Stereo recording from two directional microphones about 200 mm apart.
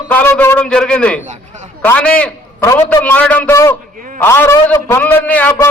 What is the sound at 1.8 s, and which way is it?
A man's voice, 5° left (ahead or behind).